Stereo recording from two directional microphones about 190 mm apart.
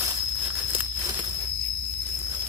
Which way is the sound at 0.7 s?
10° right (ahead or behind).